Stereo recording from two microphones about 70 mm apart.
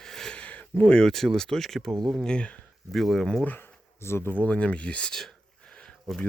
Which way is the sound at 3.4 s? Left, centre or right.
Left.